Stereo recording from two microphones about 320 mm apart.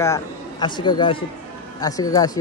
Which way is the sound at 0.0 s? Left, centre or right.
Centre.